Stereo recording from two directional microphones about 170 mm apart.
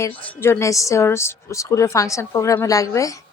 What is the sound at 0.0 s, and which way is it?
A woman's voice, 15° left (ahead or behind).